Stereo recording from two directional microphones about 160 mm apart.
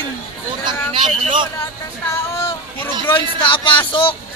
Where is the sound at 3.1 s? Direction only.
30° left (ahead or behind).